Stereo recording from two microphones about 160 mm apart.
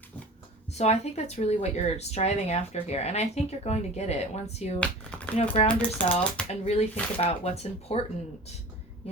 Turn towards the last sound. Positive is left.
turn(degrees=40)  # may be behind; listen again after turning